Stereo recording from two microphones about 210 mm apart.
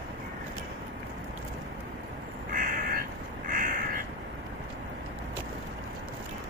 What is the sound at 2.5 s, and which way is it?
Crow, 40° right (ahead or behind).